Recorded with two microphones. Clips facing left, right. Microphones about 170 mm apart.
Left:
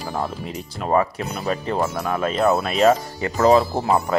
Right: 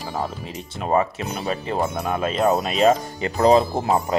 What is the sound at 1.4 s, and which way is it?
Speech, centre (ahead or behind).